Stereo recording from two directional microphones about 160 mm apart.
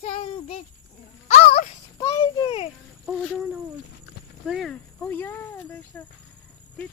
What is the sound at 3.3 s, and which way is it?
Speech, 10° right (ahead or behind).